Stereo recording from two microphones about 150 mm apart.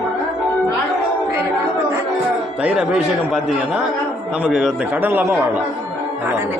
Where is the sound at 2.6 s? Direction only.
5° right (ahead or behind).